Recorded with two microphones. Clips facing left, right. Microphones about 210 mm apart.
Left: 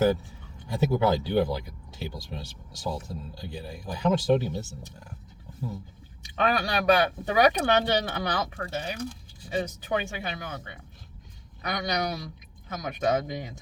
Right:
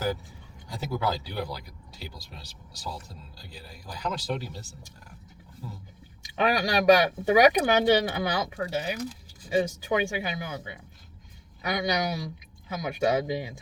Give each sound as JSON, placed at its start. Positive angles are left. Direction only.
{"t": 0.7, "sound": "speech", "side_deg": 25}
{"t": 6.2, "sound": "speech", "side_deg": -10}